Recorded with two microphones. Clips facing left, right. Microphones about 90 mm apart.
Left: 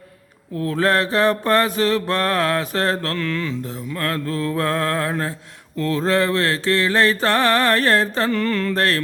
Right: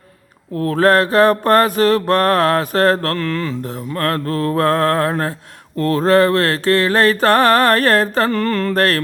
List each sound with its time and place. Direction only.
0.6 s mantra: 50° right (ahead or behind)